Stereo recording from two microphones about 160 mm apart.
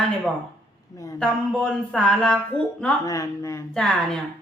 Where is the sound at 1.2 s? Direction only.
5° left (ahead or behind).